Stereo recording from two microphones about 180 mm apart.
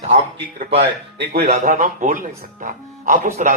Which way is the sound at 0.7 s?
70° right (ahead or behind).